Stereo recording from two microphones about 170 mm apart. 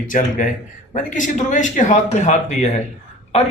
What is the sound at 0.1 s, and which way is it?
A man's voice, 50° left (ahead or behind).